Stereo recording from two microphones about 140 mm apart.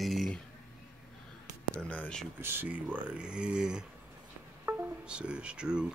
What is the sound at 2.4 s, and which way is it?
Speech, 15° right (ahead or behind).